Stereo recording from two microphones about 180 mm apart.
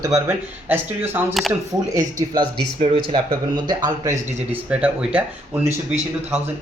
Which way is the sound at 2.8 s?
30° right (ahead or behind).